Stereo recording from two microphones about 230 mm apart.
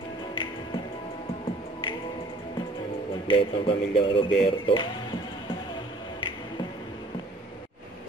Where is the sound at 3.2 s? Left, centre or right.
Left.